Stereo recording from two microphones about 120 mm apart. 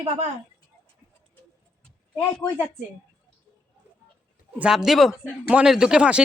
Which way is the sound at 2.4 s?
35° left (ahead or behind).